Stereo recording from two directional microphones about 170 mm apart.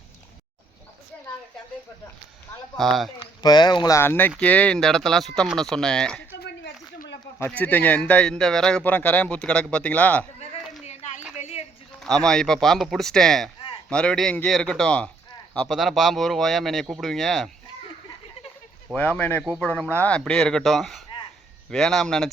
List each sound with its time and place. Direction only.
2.7 s speech: centre (ahead or behind)
3.2 s speech: 25° left (ahead or behind); by 6.2 s 5° left (ahead or behind)
7.3 s a man's voice: 10° left (ahead or behind)
10.8 s a sound: 45° left (ahead or behind)
11.9 s speech: 5° left (ahead or behind)
18.9 s speech: 10° left (ahead or behind)